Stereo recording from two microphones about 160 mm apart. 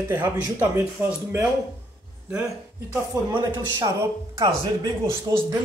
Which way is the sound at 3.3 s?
25° right (ahead or behind).